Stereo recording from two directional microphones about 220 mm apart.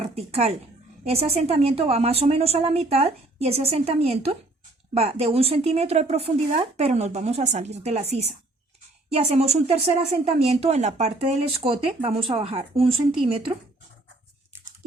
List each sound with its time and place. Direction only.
0.0 s a woman's voice: 30° right (ahead or behind)